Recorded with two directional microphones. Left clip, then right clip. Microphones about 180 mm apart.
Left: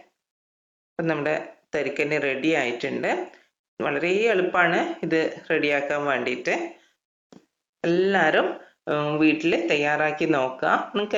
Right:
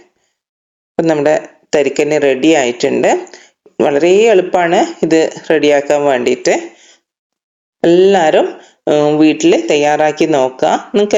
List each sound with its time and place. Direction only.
0.9 s speech: 40° right (ahead or behind)